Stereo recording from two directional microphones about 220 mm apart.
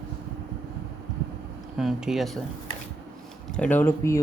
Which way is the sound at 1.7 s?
Centre (ahead or behind).